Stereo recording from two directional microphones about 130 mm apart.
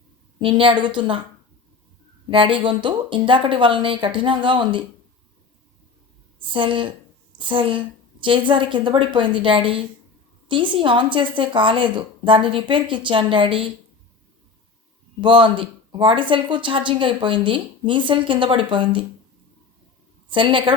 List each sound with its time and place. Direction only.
0.3 s speech: 40° right (ahead or behind)
2.3 s speech: 40° right (ahead or behind)
6.5 s a woman's voice: 40° right (ahead or behind)
15.2 s speech: 40° right (ahead or behind)
20.3 s speech: 40° right (ahead or behind)